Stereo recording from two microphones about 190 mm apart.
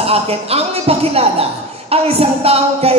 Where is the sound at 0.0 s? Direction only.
30° right (ahead or behind).